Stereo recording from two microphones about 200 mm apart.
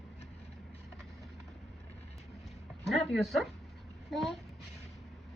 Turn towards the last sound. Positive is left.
turn(degrees=0)  # may be behind; listen again after turning